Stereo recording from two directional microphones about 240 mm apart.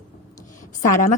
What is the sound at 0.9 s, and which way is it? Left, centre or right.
Speech, left.